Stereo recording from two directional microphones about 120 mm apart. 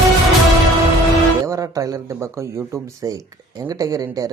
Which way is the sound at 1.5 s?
30° right (ahead or behind).